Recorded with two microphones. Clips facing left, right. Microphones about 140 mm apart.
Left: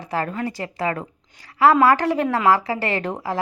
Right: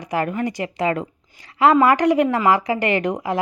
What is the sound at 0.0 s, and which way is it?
A woman's voice, 15° right (ahead or behind).